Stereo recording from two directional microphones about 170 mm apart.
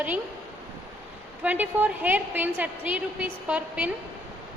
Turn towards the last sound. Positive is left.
turn(degrees=-5)  # may be behind; listen again after turning